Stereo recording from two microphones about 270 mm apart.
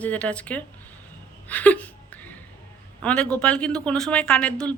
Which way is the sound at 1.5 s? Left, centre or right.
Centre.